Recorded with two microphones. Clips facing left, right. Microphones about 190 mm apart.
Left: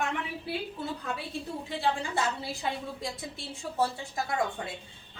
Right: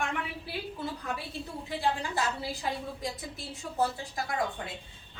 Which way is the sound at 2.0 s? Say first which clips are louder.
Left 1 dB; 25° left (ahead or behind).